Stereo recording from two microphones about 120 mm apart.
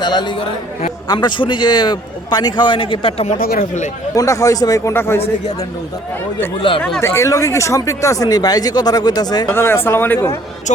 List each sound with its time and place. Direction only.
0.0 s speech: 40° left (ahead or behind)
4.1 s speech: 30° left (ahead or behind)
6.6 s speech: 45° left (ahead or behind)
7.0 s speech: 25° left (ahead or behind)
9.5 s speech: 20° left (ahead or behind)